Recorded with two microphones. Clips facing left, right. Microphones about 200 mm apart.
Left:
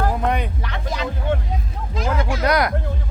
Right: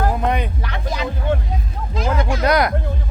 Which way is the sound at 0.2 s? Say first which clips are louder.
Right 1 dB; 20° right (ahead or behind).